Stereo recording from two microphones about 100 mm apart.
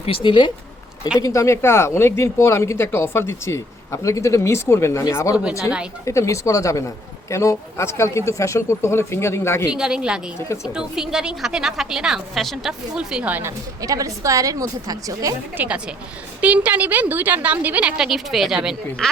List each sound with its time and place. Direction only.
0.0 s speech: 65° left (ahead or behind)
1.2 s speech: 30° left (ahead or behind)
5.4 s a woman's voice: 10° right (ahead or behind)
6.1 s speech: 30° left (ahead or behind)
9.7 s a woman's voice: 5° right (ahead or behind)
13.4 s a woman's voice: 35° right (ahead or behind)
15.5 s a woman's voice: 15° right (ahead or behind)